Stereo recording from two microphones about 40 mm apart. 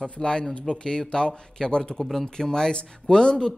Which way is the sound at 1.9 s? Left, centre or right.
Centre.